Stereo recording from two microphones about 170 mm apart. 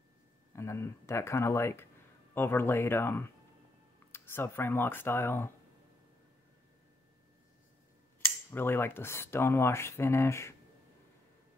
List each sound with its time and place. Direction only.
0.5 s speech: 15° left (ahead or behind)
8.5 s speech: 10° left (ahead or behind)